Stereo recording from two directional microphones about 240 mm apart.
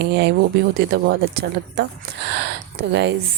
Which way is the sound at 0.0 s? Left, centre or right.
Right.